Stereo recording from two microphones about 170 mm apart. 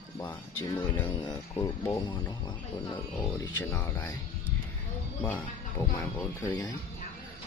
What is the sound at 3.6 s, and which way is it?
Speech, 15° left (ahead or behind).